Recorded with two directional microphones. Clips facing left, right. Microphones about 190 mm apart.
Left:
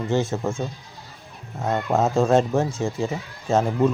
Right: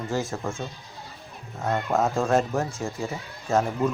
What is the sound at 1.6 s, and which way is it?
Speech, 20° left (ahead or behind).